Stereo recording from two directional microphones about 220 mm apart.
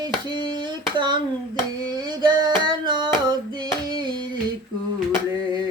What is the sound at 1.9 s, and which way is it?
Music, 20° right (ahead or behind).